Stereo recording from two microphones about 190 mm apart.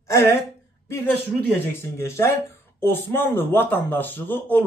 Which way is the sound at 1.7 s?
15° left (ahead or behind).